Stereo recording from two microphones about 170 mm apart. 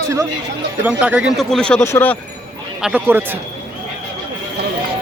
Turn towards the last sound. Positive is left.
turn(degrees=-10)  # may be behind; listen again after turning